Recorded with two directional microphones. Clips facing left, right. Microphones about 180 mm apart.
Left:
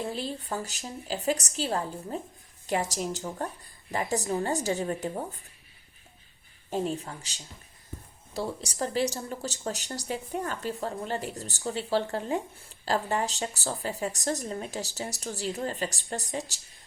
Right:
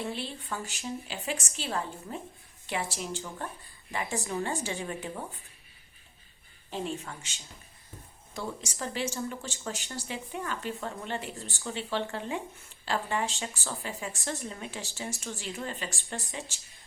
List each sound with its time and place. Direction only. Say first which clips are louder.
0.0 s speech: left 3 dB; 40° left (ahead or behind)
6.7 s speech: left 5 dB; 40° left (ahead or behind)